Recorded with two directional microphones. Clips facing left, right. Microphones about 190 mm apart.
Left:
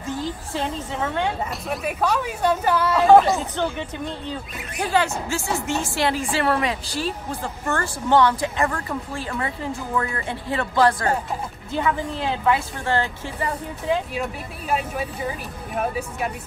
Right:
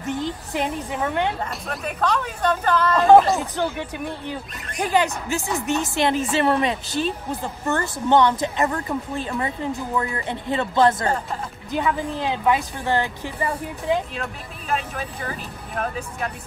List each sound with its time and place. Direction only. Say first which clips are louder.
0.0 s a woman's voice: right 2 dB; 20° right (ahead or behind)
1.4 s speech: left 2 dB; 5° left (ahead or behind)
4.7 s a woman's voice: right 1 dB; 15° right (ahead or behind)
14.1 s speech: left 3 dB; 10° left (ahead or behind)